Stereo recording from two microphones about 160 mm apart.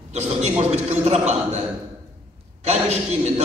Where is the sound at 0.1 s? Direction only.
45° right (ahead or behind).